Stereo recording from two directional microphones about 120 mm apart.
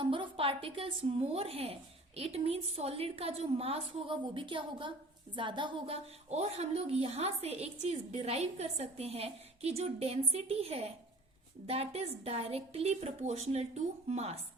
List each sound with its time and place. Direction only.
0.0 s a woman's voice: 50° right (ahead or behind)
5.9 s a woman's voice: 65° right (ahead or behind)